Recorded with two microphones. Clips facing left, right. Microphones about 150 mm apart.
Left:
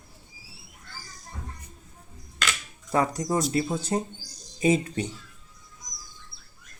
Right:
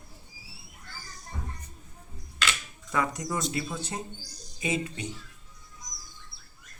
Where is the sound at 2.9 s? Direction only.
35° left (ahead or behind).